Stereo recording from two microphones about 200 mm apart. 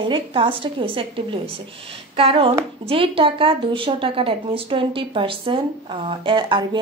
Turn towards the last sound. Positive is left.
turn(degrees=-25)  # may be behind; listen again after turning